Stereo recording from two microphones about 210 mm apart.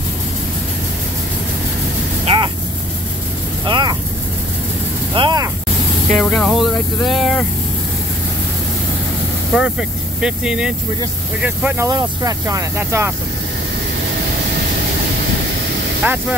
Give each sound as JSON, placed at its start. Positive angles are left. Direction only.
{"t": 2.2, "sound": "vehicle", "side_deg": -20}
{"t": 3.6, "sound": "vehicle", "side_deg": -20}
{"t": 5.1, "sound": "a sound", "side_deg": -20}
{"t": 6.1, "sound": "a sound", "side_deg": 0}
{"t": 9.6, "sound": "speech", "side_deg": -5}
{"t": 16.0, "sound": "speech", "side_deg": -5}